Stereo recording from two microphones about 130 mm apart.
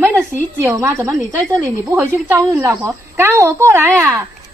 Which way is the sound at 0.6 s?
20° right (ahead or behind).